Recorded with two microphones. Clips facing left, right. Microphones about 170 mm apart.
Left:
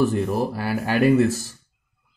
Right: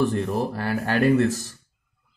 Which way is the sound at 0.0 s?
5° left (ahead or behind).